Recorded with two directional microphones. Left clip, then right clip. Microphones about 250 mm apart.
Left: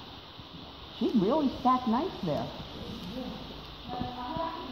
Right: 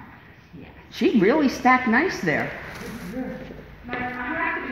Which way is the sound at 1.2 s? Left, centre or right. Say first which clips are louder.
Right 8 dB; right.